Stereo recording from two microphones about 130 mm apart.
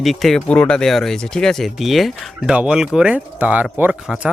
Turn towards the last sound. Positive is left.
turn(degrees=-5)  # may be behind; listen again after turning